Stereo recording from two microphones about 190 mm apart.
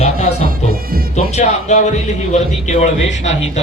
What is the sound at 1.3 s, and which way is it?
A man's voice, 35° left (ahead or behind).